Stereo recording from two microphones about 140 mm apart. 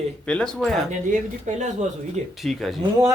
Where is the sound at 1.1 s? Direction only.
55° right (ahead or behind).